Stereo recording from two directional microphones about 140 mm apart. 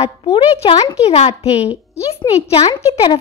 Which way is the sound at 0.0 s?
45° left (ahead or behind).